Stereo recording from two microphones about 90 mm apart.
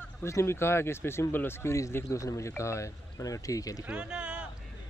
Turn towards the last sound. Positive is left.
turn(degrees=-10)  # may be behind; listen again after turning